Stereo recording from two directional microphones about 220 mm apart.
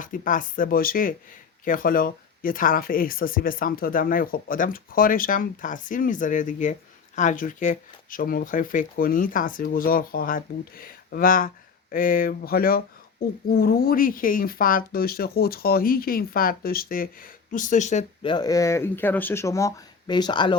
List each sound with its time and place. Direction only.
0.0 s speech: 35° left (ahead or behind); by 20.6 s 20° left (ahead or behind)